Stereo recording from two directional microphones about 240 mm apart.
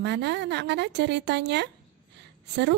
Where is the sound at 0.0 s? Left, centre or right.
Right.